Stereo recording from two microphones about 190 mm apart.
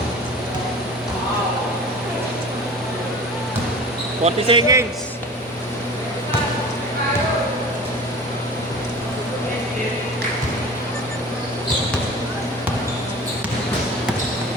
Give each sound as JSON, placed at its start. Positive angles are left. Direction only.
{"t": 4.2, "sound": "speech", "side_deg": -25}